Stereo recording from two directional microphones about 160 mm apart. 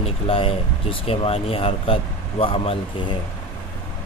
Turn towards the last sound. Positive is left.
turn(degrees=35)  # may be behind; listen again after turning